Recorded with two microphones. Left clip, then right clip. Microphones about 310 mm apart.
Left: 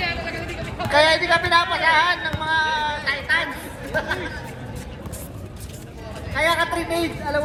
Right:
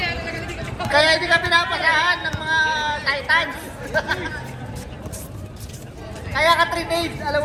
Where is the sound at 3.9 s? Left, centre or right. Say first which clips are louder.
Right 2 dB; right.